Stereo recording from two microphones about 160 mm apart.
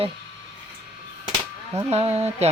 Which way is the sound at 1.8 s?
40° right (ahead or behind).